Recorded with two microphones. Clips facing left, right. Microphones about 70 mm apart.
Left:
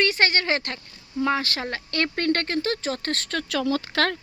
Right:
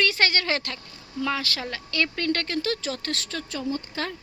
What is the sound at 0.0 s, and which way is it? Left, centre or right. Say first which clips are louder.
Speech: left 2 dB; left.